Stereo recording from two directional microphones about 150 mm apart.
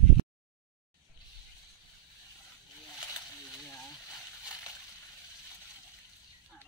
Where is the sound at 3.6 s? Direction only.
20° left (ahead or behind).